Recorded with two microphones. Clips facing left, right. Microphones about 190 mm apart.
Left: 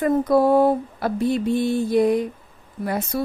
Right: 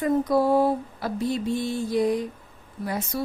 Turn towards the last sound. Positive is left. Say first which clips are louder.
# left 4 dB
turn(degrees=55)  # may be behind; listen again after turning